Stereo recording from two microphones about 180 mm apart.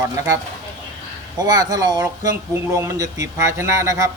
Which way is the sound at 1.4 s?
20° right (ahead or behind).